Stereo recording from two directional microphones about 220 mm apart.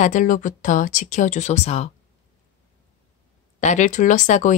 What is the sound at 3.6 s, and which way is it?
Speech, 35° left (ahead or behind).